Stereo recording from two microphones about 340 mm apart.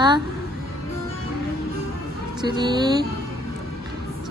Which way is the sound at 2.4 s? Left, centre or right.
Centre.